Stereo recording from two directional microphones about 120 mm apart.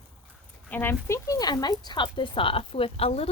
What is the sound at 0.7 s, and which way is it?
Speech, 20° left (ahead or behind).